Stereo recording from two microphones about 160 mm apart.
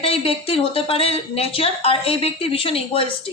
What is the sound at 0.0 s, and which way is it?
Speech, 40° left (ahead or behind).